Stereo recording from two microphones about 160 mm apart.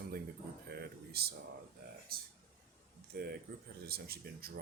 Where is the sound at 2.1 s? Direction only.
70° right (ahead or behind).